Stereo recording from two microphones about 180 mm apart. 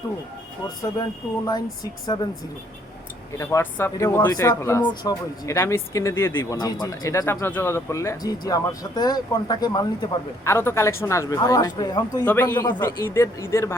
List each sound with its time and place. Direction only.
1.5 s speech: 20° left (ahead or behind)
3.3 s speech: 15° left (ahead or behind)